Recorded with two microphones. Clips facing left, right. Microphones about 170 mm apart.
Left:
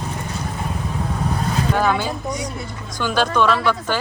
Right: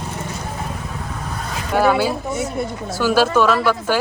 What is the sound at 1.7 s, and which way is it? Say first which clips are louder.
Speech: right 7 dB; 10° right (ahead or behind).